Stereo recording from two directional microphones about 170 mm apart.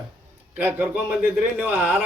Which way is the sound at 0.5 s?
10° right (ahead or behind).